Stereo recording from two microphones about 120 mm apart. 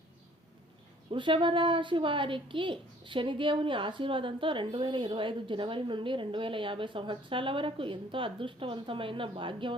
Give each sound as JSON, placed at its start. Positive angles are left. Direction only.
{"t": 1.1, "sound": "a woman's voice", "side_deg": -45}